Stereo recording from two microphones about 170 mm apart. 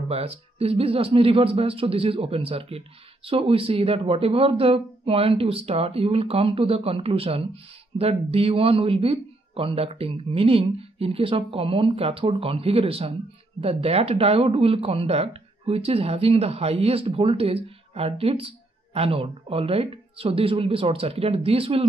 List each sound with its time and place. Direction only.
0.1 s a man's voice: 35° right (ahead or behind)